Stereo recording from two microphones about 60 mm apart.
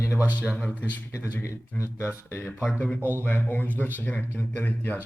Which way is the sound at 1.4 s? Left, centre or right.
Left.